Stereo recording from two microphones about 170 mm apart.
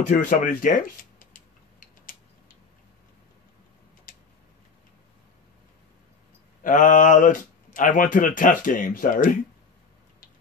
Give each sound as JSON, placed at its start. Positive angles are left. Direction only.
{"t": 0.1, "sound": "speech", "side_deg": 50}
{"t": 4.1, "sound": "tick-tock", "side_deg": 55}
{"t": 6.6, "sound": "speech", "side_deg": 50}